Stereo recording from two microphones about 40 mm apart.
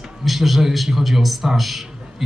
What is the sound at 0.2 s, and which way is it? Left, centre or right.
A man's voice, centre.